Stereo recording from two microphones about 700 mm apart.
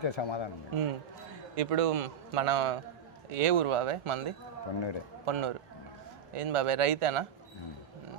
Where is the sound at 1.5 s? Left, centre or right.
Right.